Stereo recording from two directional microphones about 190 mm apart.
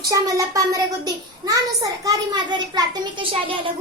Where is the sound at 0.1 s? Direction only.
15° right (ahead or behind).